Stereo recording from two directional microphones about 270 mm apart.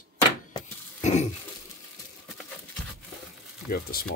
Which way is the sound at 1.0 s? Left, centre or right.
Left.